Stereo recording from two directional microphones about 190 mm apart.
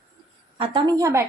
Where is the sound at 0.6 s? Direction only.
25° right (ahead or behind).